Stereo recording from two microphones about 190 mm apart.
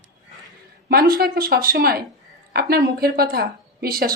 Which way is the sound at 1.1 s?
55° right (ahead or behind).